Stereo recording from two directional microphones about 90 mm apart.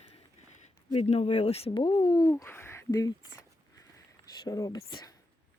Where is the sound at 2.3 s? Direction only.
30° left (ahead or behind).